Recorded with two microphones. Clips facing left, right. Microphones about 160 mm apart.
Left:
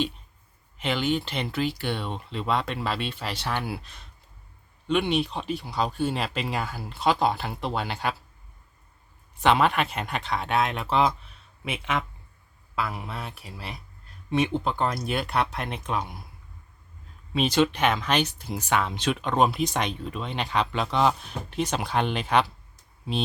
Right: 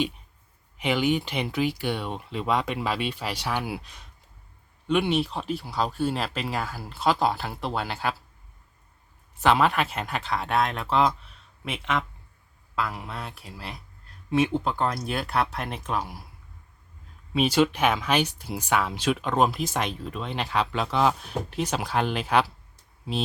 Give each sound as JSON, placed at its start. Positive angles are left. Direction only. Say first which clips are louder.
{"t": 0.8, "sound": "speech", "louder": "right 2 dB", "side_deg": -10}
{"t": 9.4, "sound": "speech", "louder": "even", "side_deg": 0}
{"t": 17.3, "sound": "speech", "louder": "right 1 dB", "side_deg": -10}